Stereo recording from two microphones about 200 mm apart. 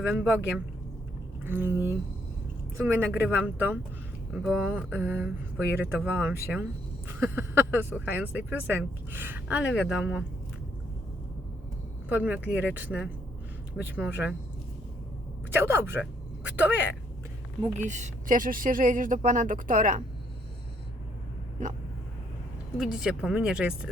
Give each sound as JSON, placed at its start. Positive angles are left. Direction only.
{"t": 0.1, "sound": "speech", "side_deg": -5}
{"t": 12.0, "sound": "speech", "side_deg": -5}
{"t": 15.5, "sound": "speech", "side_deg": -10}
{"t": 17.7, "sound": "speech", "side_deg": -35}
{"t": 22.8, "sound": "speech", "side_deg": 0}